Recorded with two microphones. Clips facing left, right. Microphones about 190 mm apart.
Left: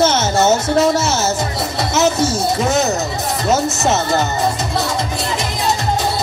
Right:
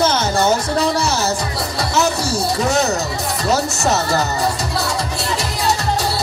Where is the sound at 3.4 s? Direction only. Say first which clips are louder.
Left 2 dB; 20° left (ahead or behind).